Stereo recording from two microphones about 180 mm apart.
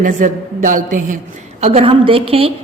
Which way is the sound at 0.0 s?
45° right (ahead or behind).